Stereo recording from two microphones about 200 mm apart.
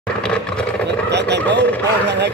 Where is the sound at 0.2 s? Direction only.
5° left (ahead or behind).